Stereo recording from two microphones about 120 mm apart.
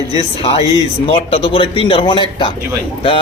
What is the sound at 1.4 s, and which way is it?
A man's voice, 45° left (ahead or behind).